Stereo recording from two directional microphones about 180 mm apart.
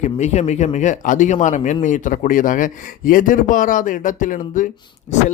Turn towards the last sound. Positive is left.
turn(degrees=45)  # may be behind; listen again after turning